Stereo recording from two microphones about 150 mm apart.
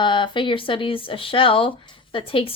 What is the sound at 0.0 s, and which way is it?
Speech, 30° left (ahead or behind).